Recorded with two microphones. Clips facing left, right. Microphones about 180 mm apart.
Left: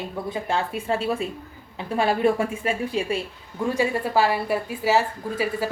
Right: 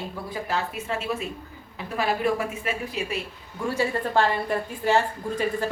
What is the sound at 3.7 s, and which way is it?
A woman's voice, 15° left (ahead or behind).